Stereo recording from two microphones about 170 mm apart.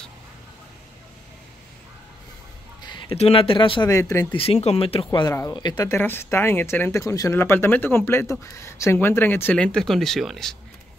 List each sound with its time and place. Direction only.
2.8 s speech: 30° left (ahead or behind)
3.9 s speech: 20° left (ahead or behind)
4.3 s speech: 35° left (ahead or behind)
5.3 s speech: 20° left (ahead or behind)
5.9 s speech: 15° left (ahead or behind)